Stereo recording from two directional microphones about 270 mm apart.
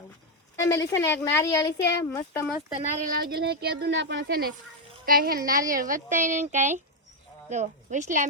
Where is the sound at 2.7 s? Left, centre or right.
Right.